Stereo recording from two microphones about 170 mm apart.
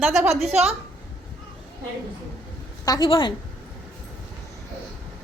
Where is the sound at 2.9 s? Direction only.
25° left (ahead or behind).